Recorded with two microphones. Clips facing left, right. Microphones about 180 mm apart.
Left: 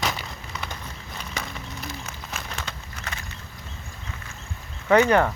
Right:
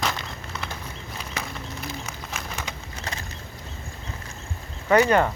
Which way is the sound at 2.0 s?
5° right (ahead or behind).